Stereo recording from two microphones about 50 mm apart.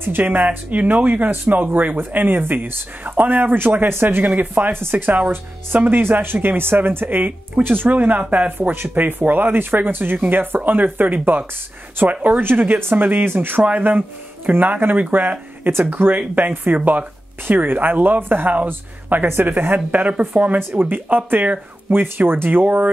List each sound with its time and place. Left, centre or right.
0.2 s speech: right
8.3 s speech: right
13.6 s speech: right